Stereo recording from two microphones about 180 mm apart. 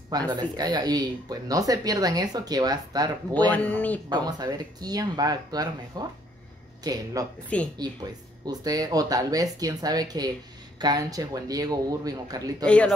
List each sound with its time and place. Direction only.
0.3 s speech: 20° right (ahead or behind)
3.4 s speech: 10° left (ahead or behind)
4.1 s speech: 20° right (ahead or behind)
7.5 s speech: 5° left (ahead or behind)
8.5 s speech: 20° right (ahead or behind)
12.6 s speech: 5° left (ahead or behind)